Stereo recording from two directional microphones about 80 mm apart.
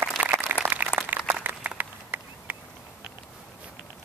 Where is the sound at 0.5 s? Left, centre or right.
Right.